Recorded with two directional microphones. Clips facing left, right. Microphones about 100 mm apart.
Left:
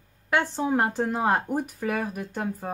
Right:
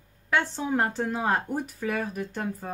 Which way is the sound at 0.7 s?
15° left (ahead or behind).